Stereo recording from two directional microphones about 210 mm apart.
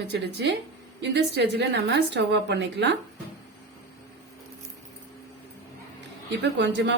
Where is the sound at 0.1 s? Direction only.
55° right (ahead or behind).